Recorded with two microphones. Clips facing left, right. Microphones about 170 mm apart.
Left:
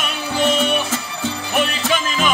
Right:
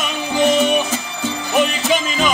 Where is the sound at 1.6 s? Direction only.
15° right (ahead or behind).